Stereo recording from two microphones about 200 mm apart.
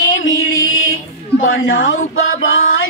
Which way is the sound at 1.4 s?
80° left.